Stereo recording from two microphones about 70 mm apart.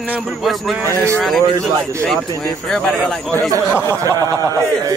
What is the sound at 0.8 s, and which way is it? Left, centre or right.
Speech, right.